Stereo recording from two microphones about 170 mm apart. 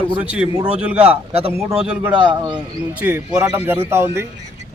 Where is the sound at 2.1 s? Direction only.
25° right (ahead or behind).